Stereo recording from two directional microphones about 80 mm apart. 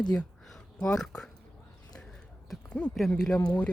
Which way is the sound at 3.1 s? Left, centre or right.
Centre.